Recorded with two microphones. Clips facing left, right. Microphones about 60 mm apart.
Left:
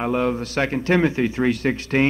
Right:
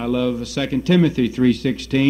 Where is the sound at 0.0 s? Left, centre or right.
Left.